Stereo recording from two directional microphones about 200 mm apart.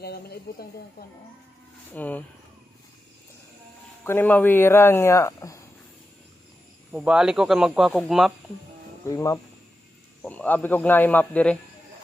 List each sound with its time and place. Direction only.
0.0 s speech: 50° left (ahead or behind)
1.9 s speech: 10° left (ahead or behind)
4.0 s speech: 10° left (ahead or behind)
6.9 s speech: 5° right (ahead or behind)
9.0 s speech: 15° left (ahead or behind)